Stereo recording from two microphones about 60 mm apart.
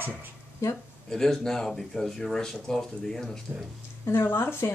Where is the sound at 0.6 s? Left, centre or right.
Left.